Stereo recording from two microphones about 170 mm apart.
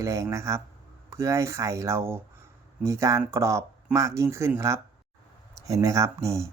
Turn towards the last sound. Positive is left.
turn(degrees=-15)  # may be behind; listen again after turning